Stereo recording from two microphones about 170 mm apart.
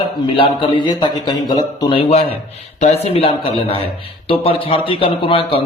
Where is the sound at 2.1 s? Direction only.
40° left (ahead or behind).